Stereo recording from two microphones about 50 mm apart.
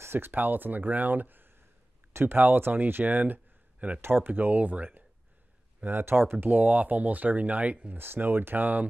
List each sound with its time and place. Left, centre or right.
0.0 s speech: right
5.8 s speech: right
6.4 s speech: right
8.0 s speech: right